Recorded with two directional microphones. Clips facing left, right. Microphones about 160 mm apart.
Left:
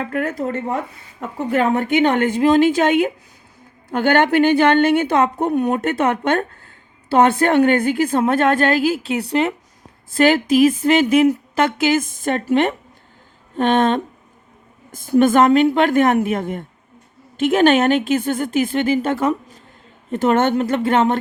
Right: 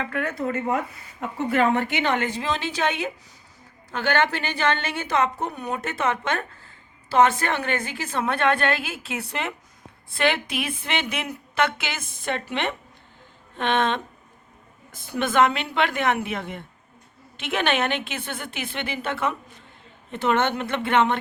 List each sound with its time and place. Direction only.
0.0 s a woman's voice: 40° left (ahead or behind)